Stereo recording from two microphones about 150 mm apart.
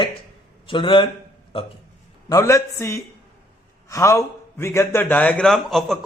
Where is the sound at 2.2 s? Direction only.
20° left (ahead or behind).